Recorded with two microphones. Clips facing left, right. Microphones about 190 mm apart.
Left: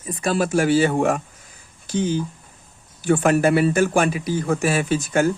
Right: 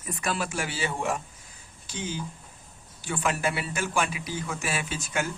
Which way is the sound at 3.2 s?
55° left (ahead or behind).